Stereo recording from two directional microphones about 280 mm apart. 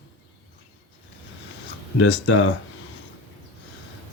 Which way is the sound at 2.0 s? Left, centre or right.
Left.